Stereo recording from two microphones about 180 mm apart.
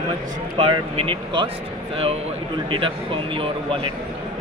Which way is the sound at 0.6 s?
30° right (ahead or behind).